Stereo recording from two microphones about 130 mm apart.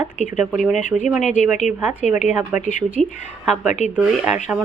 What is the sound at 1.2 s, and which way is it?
Speech, 70° left (ahead or behind).